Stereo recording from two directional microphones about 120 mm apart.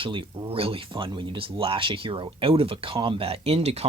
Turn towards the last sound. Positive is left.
turn(degrees=-60)  # may be behind; listen again after turning